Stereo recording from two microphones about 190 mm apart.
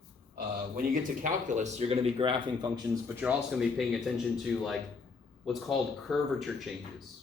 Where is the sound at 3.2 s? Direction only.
5° right (ahead or behind).